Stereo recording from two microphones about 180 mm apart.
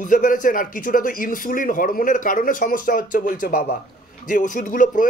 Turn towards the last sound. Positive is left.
turn(degrees=45)  # may be behind; listen again after turning